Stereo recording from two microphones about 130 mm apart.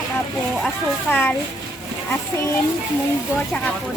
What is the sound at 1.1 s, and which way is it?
Speech, 15° left (ahead or behind).